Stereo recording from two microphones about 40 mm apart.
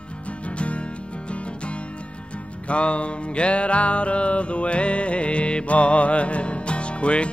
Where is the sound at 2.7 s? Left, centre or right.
Left.